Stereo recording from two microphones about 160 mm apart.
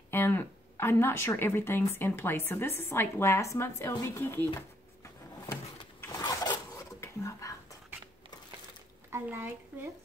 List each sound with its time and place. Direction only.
0.1 s a woman's voice: 15° left (ahead or behind)
4.6 s a sound: 15° left (ahead or behind)
6.1 s zipper: 25° left (ahead or behind)
9.1 s speech: 15° right (ahead or behind)